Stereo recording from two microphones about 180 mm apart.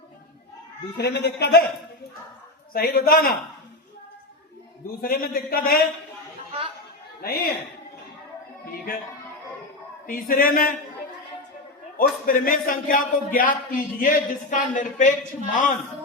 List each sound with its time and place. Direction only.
0.9 s speech: 70° left (ahead or behind)
2.7 s a man's voice: 55° left (ahead or behind)
4.9 s a man's voice: 55° left (ahead or behind)
7.2 s speech: 55° left (ahead or behind)
10.1 s speech: 50° left (ahead or behind)
11.9 s speech: 50° left (ahead or behind)